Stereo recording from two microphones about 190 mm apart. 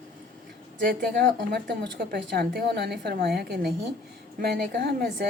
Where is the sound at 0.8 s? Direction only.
45° right (ahead or behind).